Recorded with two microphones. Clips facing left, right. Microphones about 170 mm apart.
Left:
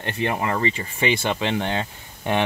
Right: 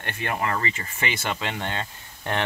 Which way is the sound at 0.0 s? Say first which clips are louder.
Left 4 dB; 25° left (ahead or behind).